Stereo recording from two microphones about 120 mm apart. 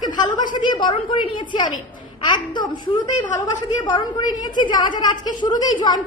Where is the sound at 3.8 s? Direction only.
35° left (ahead or behind).